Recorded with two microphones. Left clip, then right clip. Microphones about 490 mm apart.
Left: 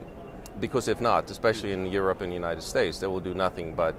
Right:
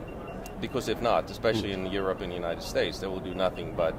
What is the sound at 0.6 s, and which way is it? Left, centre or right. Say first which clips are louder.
Speech: left 3 dB; left.